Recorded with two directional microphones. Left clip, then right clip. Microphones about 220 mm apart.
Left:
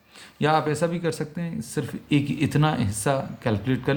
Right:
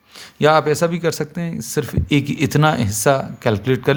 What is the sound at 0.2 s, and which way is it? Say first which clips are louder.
Speech: right 8 dB; 45° right (ahead or behind).